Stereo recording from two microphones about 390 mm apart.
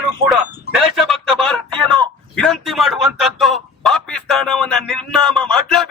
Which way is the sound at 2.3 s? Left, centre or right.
Centre.